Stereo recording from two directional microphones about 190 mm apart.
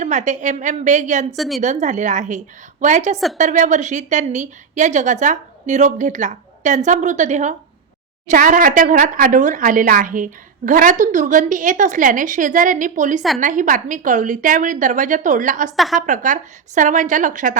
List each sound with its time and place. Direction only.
0.0 s a woman's voice: 40° right (ahead or behind)
1.4 s a woman's voice: centre (ahead or behind)
1.6 s a woman's voice: 40° right (ahead or behind)
15.7 s a woman's voice: centre (ahead or behind)
16.0 s a woman's voice: 40° right (ahead or behind)